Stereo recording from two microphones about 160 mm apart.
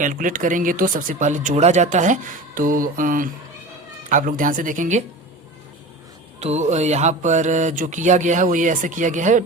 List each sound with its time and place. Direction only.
0.0 s speech: 55° right (ahead or behind)
6.4 s mantra: 45° right (ahead or behind)